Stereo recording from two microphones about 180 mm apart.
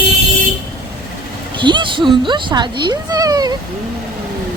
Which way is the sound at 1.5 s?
25° right (ahead or behind).